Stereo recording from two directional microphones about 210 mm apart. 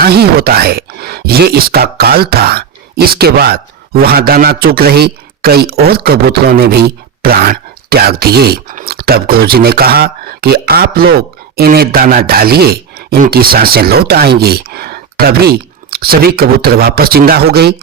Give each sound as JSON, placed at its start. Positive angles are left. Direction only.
{"t": 0.0, "sound": "speech", "side_deg": -50}